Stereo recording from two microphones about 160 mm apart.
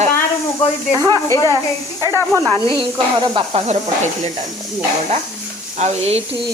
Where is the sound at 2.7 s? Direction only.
30° right (ahead or behind).